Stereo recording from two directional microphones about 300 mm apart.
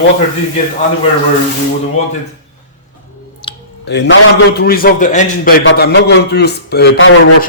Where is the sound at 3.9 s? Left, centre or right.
Left.